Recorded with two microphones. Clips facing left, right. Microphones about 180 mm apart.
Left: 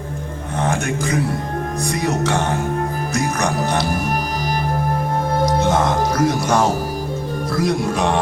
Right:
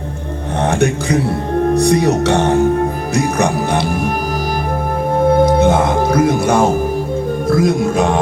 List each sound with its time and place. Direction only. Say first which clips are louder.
1.7 s speech: right 9 dB; 70° right (ahead or behind)
5.5 s speech: right 5 dB; 55° right (ahead or behind)